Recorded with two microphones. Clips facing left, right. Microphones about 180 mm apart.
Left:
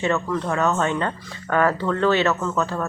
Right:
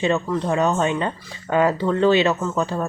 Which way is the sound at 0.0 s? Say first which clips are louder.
Right 2 dB; 15° right (ahead or behind).